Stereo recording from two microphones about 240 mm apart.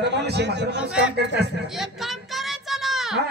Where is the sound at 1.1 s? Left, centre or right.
Right.